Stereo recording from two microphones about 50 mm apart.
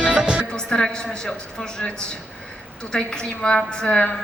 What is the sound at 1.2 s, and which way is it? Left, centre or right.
A woman's voice, centre.